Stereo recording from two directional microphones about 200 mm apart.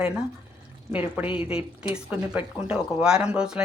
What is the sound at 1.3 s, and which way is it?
Speech, 25° left (ahead or behind).